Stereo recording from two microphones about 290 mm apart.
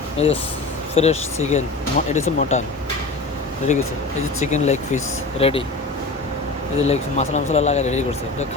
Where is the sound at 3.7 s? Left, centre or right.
Left.